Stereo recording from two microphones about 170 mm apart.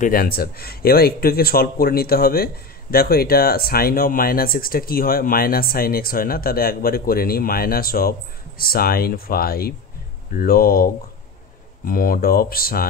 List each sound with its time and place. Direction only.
0.0 s speech: 60° left (ahead or behind)